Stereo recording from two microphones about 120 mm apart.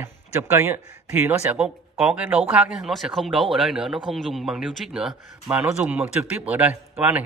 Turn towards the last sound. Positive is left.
turn(degrees=-15)  # may be behind; listen again after turning